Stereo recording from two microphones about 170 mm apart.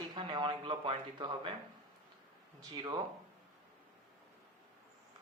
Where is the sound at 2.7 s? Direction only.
25° right (ahead or behind).